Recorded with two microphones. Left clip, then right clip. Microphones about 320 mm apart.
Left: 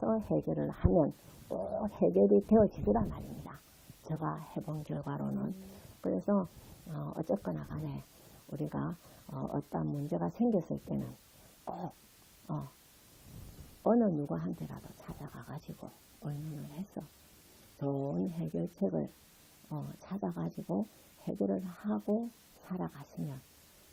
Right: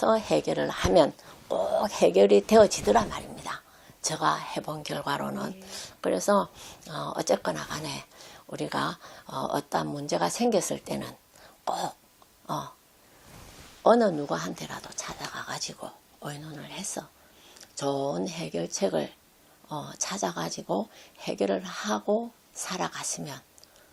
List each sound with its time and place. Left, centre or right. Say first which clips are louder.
0.0 s speech: right 9 dB; centre
2.9 s speech: right 10 dB; centre
13.8 s speech: right 9 dB; centre
17.7 s speech: right 8 dB; centre
21.5 s speech: right 9 dB; centre